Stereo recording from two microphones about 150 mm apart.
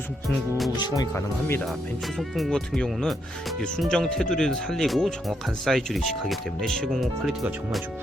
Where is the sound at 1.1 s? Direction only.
15° left (ahead or behind).